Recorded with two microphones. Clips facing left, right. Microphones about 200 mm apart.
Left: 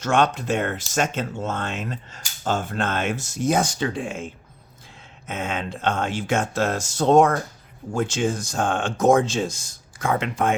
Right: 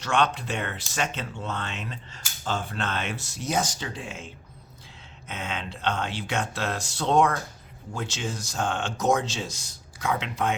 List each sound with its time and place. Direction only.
0.0 s speech: 45° left (ahead or behind)
5.3 s speech: 50° left (ahead or behind)